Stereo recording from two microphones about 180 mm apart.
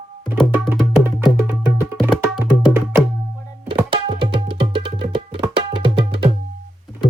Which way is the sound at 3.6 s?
25° right (ahead or behind).